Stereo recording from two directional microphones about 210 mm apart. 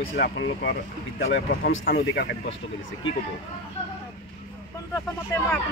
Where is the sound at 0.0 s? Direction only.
50° left (ahead or behind).